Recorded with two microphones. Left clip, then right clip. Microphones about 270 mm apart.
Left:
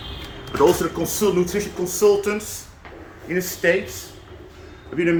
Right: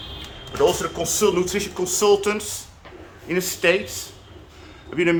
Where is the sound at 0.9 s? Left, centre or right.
Centre.